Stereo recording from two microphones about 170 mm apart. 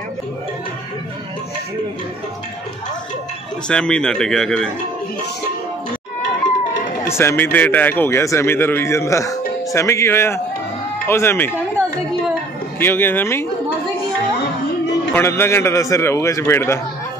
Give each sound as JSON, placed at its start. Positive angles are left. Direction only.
{"t": 3.6, "sound": "a man's voice", "side_deg": 5}
{"t": 7.1, "sound": "a man's voice", "side_deg": 15}
{"t": 12.7, "sound": "a man's voice", "side_deg": 10}
{"t": 15.1, "sound": "a man's voice", "side_deg": 15}